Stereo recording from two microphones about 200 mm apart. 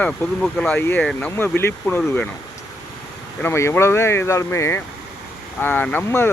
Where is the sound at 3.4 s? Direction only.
15° left (ahead or behind).